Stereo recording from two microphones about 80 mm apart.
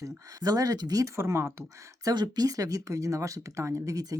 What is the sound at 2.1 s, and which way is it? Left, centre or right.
Speech, right.